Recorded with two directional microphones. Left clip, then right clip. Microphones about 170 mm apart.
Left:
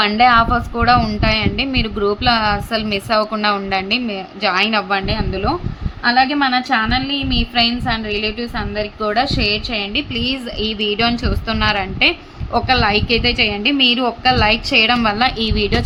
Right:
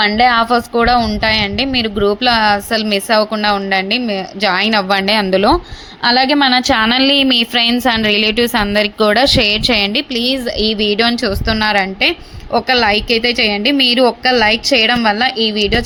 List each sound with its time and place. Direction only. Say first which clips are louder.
0.2 s a woman's voice: left 1 dB; 25° right (ahead or behind); by 5.5 s 45° right (ahead or behind)
6.1 s a woman's voice: right 3 dB; 35° right (ahead or behind)
10.2 s a woman's voice: right 5 dB; 25° right (ahead or behind)